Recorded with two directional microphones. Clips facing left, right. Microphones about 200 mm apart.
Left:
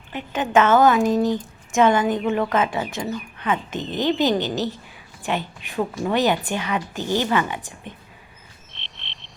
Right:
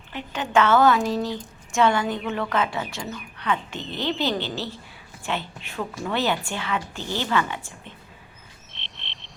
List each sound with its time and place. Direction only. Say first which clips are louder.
0.1 s a woman's voice: left 4 dB; 15° left (ahead or behind)
8.7 s frog: right 1 dB; centre (ahead or behind)